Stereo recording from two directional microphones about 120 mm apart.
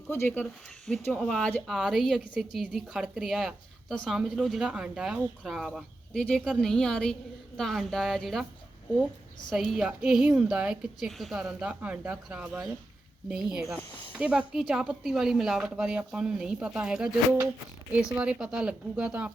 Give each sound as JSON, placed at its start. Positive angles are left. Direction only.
{"t": 0.1, "sound": "speech", "side_deg": 15}
{"t": 1.1, "sound": "a woman's voice", "side_deg": 5}
{"t": 9.5, "sound": "a woman's voice", "side_deg": 0}
{"t": 18.2, "sound": "speech", "side_deg": -10}